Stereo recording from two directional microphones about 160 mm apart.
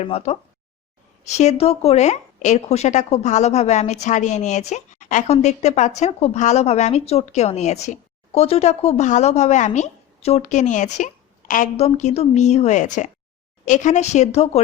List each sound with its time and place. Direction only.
0.0 s speech: 40° left (ahead or behind); by 11.7 s 55° left (ahead or behind)
11.8 s speech: 45° left (ahead or behind)